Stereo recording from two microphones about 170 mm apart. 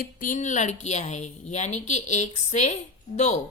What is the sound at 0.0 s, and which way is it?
Speech, 55° left (ahead or behind).